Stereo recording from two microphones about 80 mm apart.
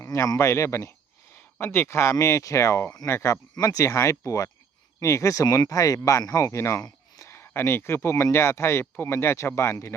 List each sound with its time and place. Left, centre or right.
0.0 s speech: left
3.5 s speech: left